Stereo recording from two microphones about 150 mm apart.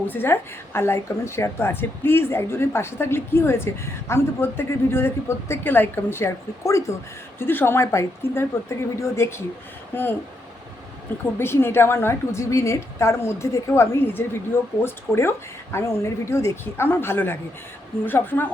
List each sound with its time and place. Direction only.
0.1 s a woman's voice: 15° left (ahead or behind)
11.3 s a woman's voice: 15° left (ahead or behind)